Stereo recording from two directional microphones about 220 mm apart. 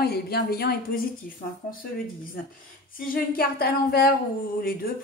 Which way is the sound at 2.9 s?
40° left (ahead or behind).